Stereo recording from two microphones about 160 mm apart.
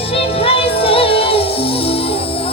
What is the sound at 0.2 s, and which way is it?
Music, 35° left (ahead or behind).